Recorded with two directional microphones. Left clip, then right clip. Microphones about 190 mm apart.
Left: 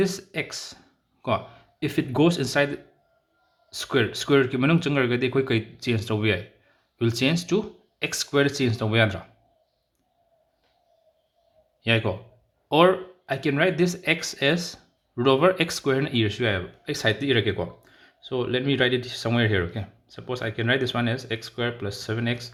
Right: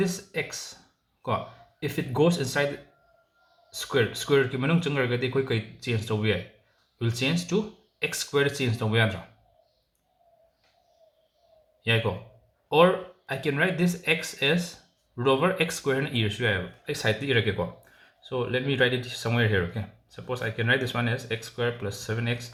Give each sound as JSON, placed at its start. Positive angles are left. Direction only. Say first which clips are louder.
{"t": 0.0, "sound": "speech", "louder": "left 3 dB", "side_deg": 45}
{"t": 3.7, "sound": "speech", "louder": "left 2 dB", "side_deg": 45}
{"t": 11.8, "sound": "a man's voice", "louder": "left 2 dB", "side_deg": 45}